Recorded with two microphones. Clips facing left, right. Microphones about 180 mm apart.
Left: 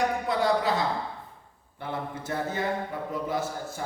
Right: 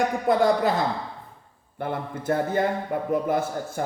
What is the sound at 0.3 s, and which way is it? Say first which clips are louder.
Speech: right 8 dB; 50° right (ahead or behind).